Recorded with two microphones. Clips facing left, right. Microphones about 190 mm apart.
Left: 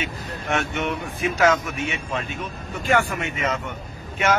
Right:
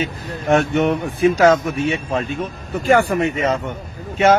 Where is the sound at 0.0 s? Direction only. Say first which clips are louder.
Right 7 dB; 35° right (ahead or behind).